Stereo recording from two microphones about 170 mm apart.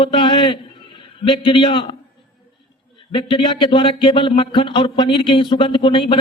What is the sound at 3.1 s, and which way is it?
Speech, 30° left (ahead or behind).